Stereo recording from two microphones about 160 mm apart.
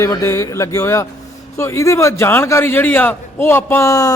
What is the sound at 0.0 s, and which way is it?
A man's voice, 20° left (ahead or behind).